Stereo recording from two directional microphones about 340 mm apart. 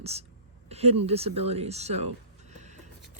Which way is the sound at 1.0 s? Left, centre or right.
Centre.